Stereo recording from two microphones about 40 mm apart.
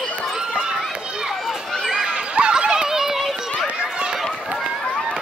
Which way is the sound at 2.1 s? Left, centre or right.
Right.